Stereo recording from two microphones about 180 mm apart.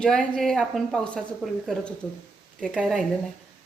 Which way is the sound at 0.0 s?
5° left (ahead or behind).